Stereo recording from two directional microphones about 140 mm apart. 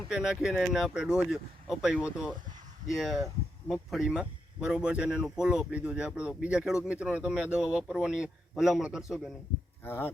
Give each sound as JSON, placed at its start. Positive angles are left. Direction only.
{"t": 0.1, "sound": "speech", "side_deg": -5}
{"t": 9.8, "sound": "speech", "side_deg": 15}